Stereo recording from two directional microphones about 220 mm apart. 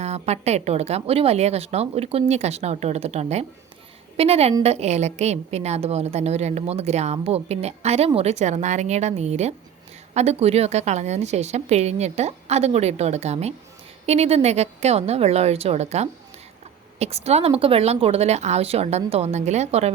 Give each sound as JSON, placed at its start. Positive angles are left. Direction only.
{"t": 0.0, "sound": "a woman's voice", "side_deg": -30}